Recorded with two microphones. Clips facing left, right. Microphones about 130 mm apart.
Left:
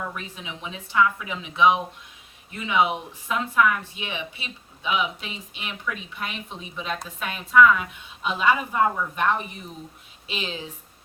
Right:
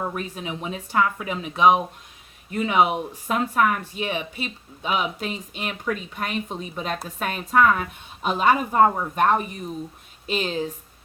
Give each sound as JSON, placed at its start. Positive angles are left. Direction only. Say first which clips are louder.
{"t": 0.0, "sound": "speech", "louder": "right 5 dB", "side_deg": -45}